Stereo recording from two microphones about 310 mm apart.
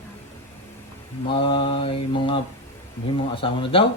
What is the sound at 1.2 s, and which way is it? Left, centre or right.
Mantra, centre.